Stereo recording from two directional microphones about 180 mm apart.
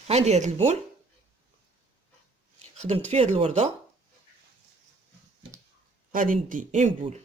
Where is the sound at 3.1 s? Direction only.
35° right (ahead or behind).